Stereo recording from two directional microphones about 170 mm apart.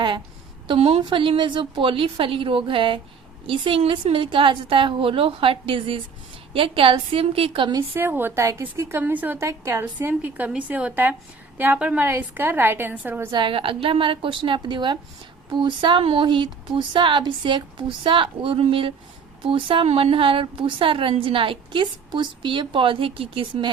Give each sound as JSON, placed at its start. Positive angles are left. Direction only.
{"t": 0.7, "sound": "a woman's voice", "side_deg": -35}
{"t": 7.9, "sound": "a woman's voice", "side_deg": -10}
{"t": 13.3, "sound": "a woman's voice", "side_deg": -30}